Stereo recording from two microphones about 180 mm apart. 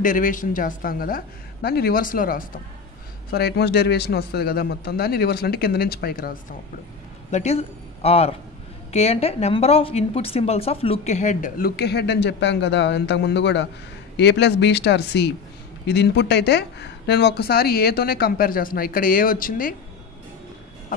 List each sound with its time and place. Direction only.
0.0 s a woman's voice: 45° left (ahead or behind)
7.2 s a man's voice: 40° left (ahead or behind)